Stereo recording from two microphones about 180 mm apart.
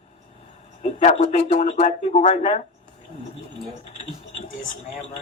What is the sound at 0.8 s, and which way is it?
A man's voice, 40° left (ahead or behind).